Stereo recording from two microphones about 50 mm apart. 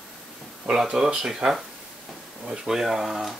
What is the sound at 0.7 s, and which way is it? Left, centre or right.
Speech, centre.